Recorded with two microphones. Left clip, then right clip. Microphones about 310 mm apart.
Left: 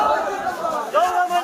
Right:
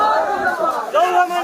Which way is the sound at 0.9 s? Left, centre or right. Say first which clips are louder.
Right 2 dB; right.